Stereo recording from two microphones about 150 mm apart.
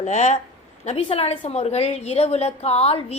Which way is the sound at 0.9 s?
40° left (ahead or behind).